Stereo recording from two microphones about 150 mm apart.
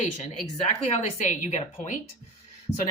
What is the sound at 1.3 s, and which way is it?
Speech, 50° left (ahead or behind).